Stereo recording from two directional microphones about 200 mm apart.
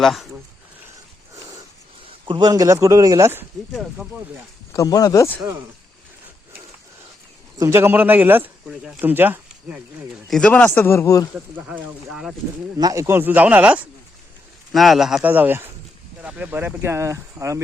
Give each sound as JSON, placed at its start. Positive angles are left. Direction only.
{"t": 0.0, "sound": "speech", "side_deg": 0}
{"t": 2.2, "sound": "speech", "side_deg": -20}
{"t": 3.7, "sound": "speech", "side_deg": 0}
{"t": 4.7, "sound": "speech", "side_deg": 15}
{"t": 7.6, "sound": "speech", "side_deg": -10}
{"t": 10.2, "sound": "speech", "side_deg": 5}
{"t": 11.3, "sound": "speech", "side_deg": -5}
{"t": 12.8, "sound": "speech", "side_deg": -15}